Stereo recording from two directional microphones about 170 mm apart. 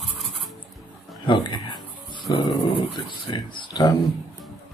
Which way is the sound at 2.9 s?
30° left (ahead or behind).